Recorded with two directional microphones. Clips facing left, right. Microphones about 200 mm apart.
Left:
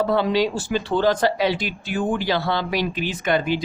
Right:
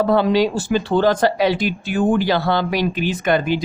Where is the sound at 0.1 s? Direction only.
45° right (ahead or behind).